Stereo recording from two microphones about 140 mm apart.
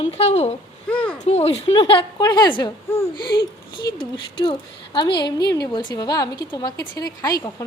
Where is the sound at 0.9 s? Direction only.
10° left (ahead or behind).